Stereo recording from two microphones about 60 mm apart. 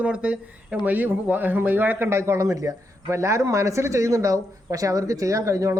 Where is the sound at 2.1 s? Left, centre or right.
Right.